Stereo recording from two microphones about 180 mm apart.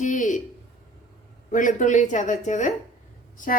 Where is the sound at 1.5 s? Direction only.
45° left (ahead or behind).